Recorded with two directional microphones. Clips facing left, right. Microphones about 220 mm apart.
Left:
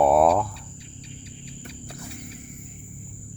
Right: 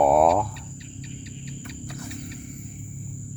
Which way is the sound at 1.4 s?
30° left (ahead or behind).